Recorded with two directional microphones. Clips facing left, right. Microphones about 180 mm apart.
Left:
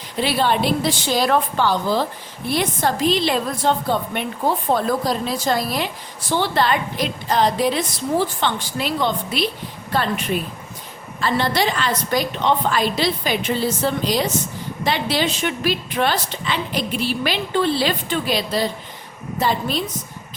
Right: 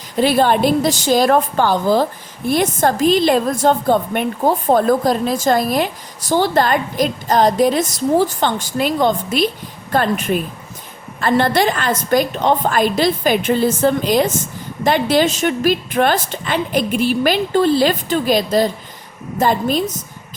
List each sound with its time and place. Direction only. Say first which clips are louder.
0.2 s a woman's voice: right 6 dB; 45° right (ahead or behind)